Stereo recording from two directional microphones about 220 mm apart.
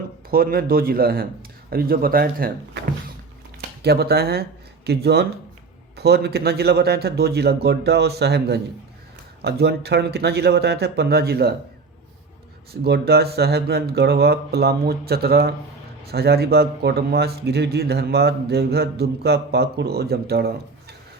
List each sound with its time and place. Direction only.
0.3 s speech: 40° right (ahead or behind)
3.8 s speech: 45° right (ahead or behind)
12.8 s speech: 45° right (ahead or behind)